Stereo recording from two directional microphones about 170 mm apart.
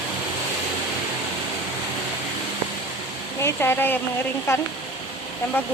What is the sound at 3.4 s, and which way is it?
Speech, 15° left (ahead or behind).